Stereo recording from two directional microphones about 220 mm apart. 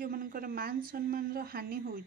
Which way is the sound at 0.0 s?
40° right (ahead or behind).